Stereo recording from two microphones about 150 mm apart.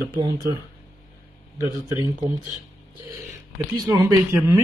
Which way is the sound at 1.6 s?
20° right (ahead or behind).